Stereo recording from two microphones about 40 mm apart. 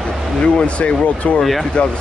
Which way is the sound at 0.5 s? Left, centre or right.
Left.